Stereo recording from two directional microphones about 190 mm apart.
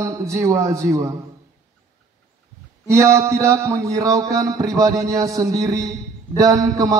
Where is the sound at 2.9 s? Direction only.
15° right (ahead or behind).